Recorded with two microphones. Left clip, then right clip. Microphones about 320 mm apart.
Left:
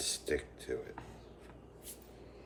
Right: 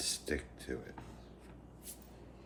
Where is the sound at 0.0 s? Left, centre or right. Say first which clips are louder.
Left 2 dB; right.